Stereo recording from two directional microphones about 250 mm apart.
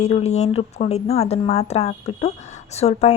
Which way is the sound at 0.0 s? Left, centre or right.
Left.